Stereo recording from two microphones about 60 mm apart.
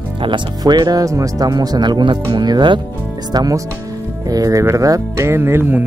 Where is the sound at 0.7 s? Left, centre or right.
Right.